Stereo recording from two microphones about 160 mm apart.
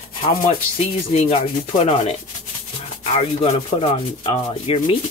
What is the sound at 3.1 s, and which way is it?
Sanding, 45° left (ahead or behind).